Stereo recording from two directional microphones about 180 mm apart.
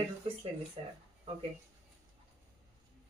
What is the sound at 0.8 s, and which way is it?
Speech, 30° right (ahead or behind).